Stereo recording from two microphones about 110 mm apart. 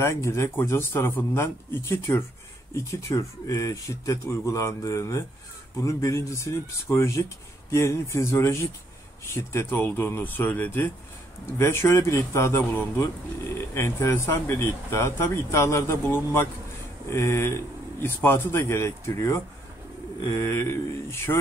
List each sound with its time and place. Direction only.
0.0 s a man's voice: 25° left (ahead or behind)